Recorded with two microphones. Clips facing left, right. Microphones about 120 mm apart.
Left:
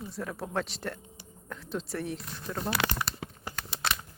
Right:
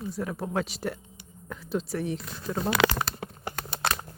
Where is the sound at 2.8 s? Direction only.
90° right.